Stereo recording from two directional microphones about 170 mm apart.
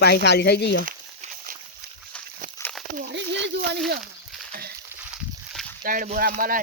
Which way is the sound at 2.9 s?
80° right.